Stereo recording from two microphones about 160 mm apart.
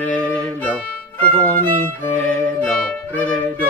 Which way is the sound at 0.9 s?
10° left (ahead or behind).